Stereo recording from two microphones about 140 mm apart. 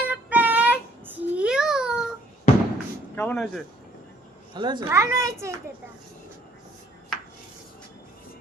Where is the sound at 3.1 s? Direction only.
10° left (ahead or behind).